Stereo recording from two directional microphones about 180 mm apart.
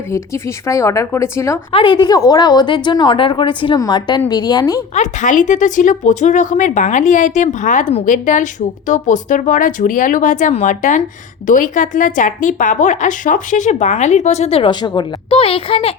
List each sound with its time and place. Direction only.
0.7 s speech: 15° left (ahead or behind)
1.7 s a woman's voice: 25° left (ahead or behind)
4.9 s a woman's voice: 45° left (ahead or behind)